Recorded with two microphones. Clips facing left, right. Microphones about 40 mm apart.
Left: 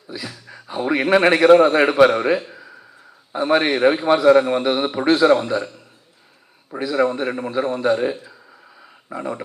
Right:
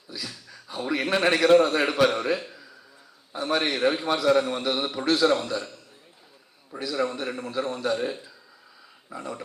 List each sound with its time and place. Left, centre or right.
0.1 s a man's voice: left
2.5 s a sound: left
3.3 s a man's voice: left
6.7 s a man's voice: left